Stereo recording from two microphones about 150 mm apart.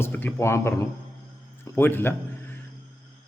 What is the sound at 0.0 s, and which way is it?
Speech, 15° left (ahead or behind).